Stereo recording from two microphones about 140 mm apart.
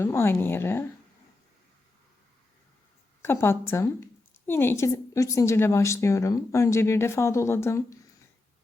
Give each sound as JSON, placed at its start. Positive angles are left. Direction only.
{"t": 0.0, "sound": "speech", "side_deg": 20}
{"t": 3.2, "sound": "a woman's voice", "side_deg": 15}